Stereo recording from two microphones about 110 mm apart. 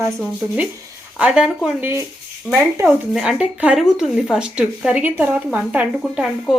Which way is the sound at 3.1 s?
5° right (ahead or behind).